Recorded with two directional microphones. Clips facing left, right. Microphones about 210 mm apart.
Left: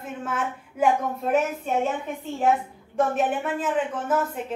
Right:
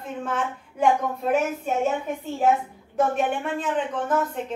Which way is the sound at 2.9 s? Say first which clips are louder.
Even; centre (ahead or behind).